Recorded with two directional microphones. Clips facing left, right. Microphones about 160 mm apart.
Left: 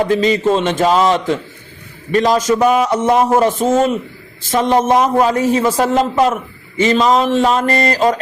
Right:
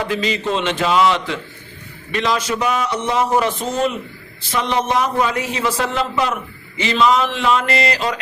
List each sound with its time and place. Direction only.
0.0 s a man's voice: 40° left (ahead or behind)